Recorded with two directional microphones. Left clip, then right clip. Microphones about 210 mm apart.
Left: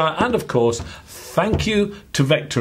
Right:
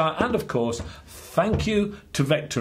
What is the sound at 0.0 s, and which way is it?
Speech, 25° left (ahead or behind).